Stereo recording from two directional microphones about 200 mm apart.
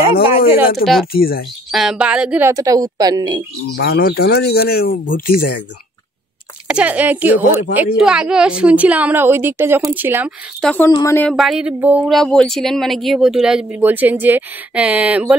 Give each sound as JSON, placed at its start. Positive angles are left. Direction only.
{"t": 0.8, "sound": "speech", "side_deg": 45}
{"t": 1.7, "sound": "a woman's voice", "side_deg": 0}
{"t": 3.7, "sound": "speech", "side_deg": 55}
{"t": 6.7, "sound": "a woman's voice", "side_deg": -5}
{"t": 10.6, "sound": "speech", "side_deg": 5}
{"t": 10.9, "sound": "speech", "side_deg": 15}
{"t": 11.3, "sound": "a woman's voice", "side_deg": 0}